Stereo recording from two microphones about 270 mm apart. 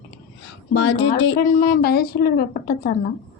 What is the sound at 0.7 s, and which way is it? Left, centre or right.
A woman's voice, left.